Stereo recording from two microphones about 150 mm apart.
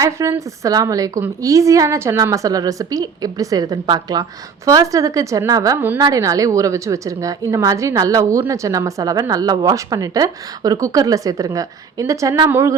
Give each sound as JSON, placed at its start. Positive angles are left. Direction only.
{"t": 0.0, "sound": "a woman's voice", "side_deg": -20}